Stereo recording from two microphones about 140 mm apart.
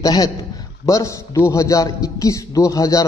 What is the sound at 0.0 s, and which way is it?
A man's voice, 25° left (ahead or behind).